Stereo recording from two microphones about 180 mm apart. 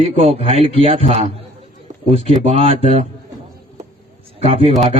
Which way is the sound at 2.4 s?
35° right (ahead or behind).